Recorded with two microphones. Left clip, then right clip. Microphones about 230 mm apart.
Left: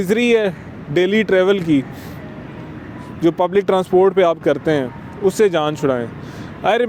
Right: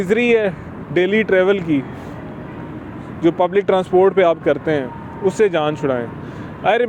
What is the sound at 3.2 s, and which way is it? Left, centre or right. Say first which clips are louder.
Speech: even; left.